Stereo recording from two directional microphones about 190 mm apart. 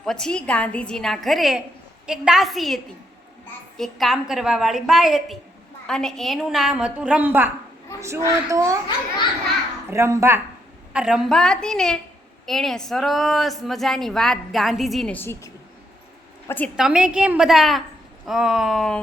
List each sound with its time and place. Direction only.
0.0 s a woman's voice: 5° left (ahead or behind); by 8.8 s 15° right (ahead or behind)
9.9 s a child's voice: 15° right (ahead or behind); by 15.4 s 10° left (ahead or behind)
16.7 s a woman's voice: 5° right (ahead or behind)